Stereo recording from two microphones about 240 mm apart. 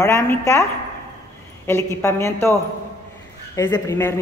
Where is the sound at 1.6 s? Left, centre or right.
Centre.